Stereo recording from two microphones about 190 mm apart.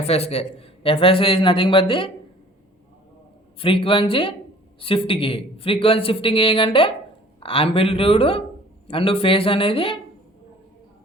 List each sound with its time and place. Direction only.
0.0 s a man's voice: 35° left (ahead or behind)
3.6 s a man's voice: 30° left (ahead or behind)